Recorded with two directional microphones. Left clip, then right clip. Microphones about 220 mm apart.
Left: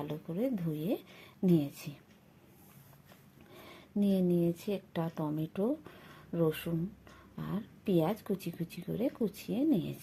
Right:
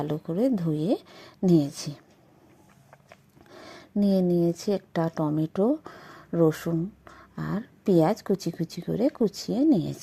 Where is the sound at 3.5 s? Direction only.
40° right (ahead or behind).